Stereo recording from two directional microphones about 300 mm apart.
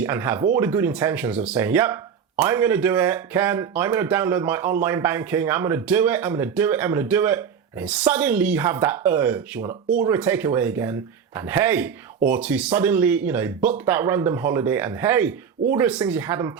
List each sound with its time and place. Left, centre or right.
0.0 s speech: centre